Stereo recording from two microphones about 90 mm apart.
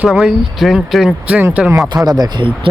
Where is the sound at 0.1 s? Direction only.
5° right (ahead or behind).